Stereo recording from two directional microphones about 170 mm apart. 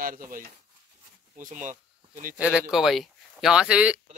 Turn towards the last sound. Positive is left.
turn(degrees=-5)  # may be behind; listen again after turning